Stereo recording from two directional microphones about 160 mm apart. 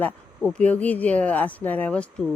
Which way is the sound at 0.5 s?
10° left (ahead or behind).